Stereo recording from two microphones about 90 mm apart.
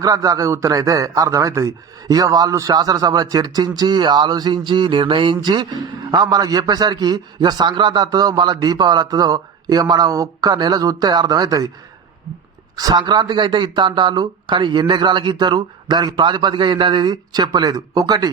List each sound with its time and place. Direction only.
0.0 s a man's voice: 40° right (ahead or behind)
12.7 s speech: 45° right (ahead or behind)